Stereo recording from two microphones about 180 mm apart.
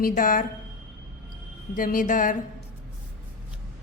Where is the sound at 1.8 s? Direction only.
50° left (ahead or behind).